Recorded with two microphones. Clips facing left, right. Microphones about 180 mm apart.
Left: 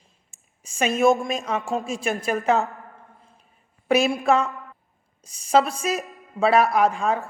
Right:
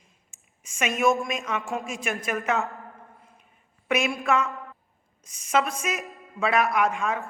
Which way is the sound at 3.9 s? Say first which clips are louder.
Left 5 dB; 35° left (ahead or behind).